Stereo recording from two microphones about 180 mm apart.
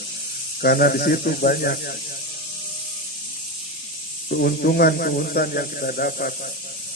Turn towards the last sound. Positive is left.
turn(degrees=55)  # may be behind; listen again after turning